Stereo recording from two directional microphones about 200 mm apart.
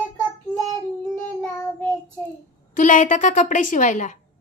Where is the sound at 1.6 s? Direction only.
10° left (ahead or behind).